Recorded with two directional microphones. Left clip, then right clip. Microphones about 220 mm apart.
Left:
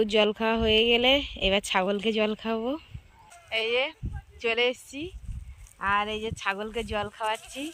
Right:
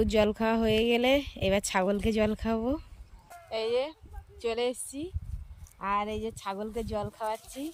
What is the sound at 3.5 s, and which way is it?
Speech, centre (ahead or behind).